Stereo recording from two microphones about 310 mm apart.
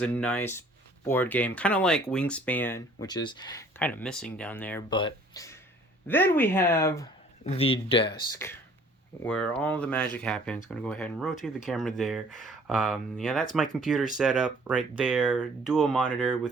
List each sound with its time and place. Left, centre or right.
0.0 s speech: centre